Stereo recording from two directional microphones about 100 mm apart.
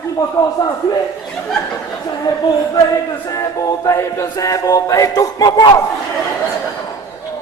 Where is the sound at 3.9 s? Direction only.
35° left (ahead or behind).